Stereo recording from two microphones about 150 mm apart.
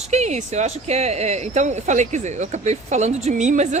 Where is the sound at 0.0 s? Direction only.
50° right (ahead or behind).